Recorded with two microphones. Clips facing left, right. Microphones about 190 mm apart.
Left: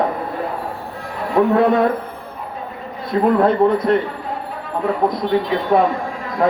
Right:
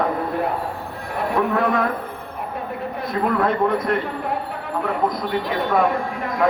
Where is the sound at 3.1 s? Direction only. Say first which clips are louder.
Left 6 dB; 30° left (ahead or behind).